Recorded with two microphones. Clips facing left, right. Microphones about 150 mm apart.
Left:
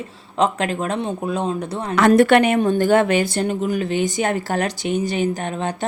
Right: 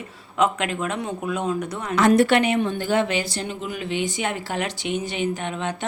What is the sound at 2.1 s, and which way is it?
Speech, 55° left (ahead or behind).